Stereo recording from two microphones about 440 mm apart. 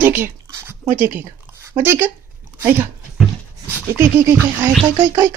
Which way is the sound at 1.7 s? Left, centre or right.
Centre.